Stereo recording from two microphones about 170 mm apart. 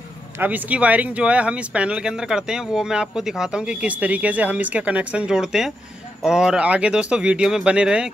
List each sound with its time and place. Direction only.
0.4 s speech: 10° right (ahead or behind)